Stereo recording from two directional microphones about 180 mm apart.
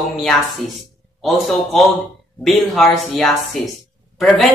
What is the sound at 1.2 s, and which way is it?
Speech, centre (ahead or behind).